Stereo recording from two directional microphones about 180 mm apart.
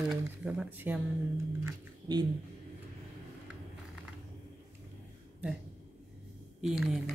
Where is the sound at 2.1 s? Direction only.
25° right (ahead or behind).